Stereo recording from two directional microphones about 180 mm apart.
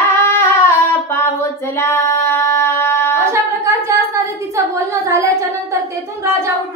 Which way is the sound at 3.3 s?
15° right (ahead or behind).